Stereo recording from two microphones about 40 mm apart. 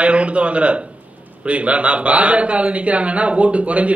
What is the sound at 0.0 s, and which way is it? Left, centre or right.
A man's voice, right.